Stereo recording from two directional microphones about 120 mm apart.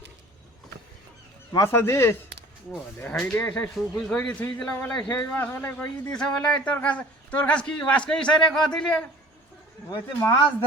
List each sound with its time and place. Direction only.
1.5 s a man's voice: 20° left (ahead or behind); by 9.0 s 5° left (ahead or behind)